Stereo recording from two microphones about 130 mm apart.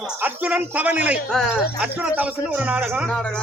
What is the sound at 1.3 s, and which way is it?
Speech, 5° left (ahead or behind).